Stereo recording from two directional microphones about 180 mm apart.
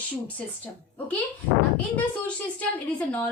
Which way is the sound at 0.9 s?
10° left (ahead or behind).